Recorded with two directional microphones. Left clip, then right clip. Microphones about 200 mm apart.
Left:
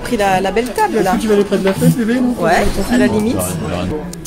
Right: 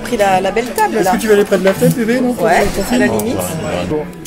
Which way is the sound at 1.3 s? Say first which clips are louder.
Right 4 dB; 35° right (ahead or behind).